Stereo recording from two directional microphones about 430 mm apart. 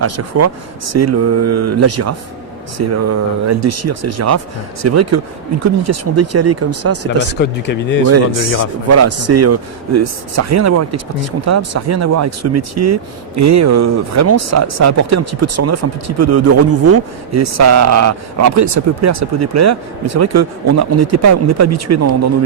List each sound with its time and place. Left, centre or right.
0.0 s speech: right
7.3 s speech: left
8.9 s speech: right